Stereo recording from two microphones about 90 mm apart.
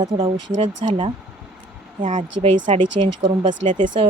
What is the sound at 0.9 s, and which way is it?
Speech, 65° right (ahead or behind).